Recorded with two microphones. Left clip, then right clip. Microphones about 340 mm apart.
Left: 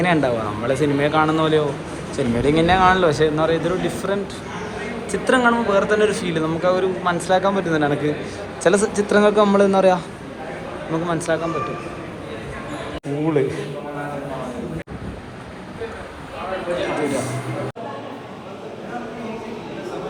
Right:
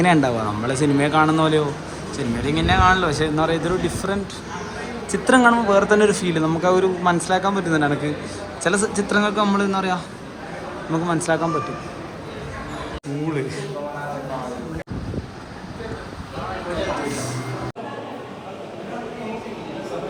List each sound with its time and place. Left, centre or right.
0.0 s speech: centre